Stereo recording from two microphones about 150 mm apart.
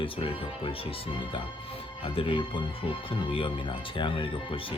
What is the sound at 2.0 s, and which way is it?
Speech, 35° left (ahead or behind).